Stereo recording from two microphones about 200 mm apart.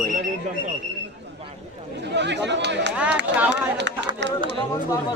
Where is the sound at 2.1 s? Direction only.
60° right (ahead or behind).